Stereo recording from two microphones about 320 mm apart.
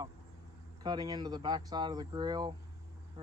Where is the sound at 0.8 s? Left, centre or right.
Centre.